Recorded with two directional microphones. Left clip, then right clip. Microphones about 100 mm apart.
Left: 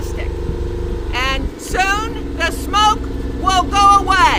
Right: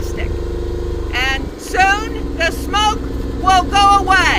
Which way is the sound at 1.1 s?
70° left (ahead or behind).